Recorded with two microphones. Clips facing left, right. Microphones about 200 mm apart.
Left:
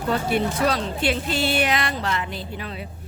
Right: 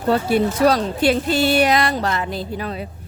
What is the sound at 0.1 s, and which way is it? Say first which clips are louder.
A woman's voice: right 5 dB; 40° right (ahead or behind).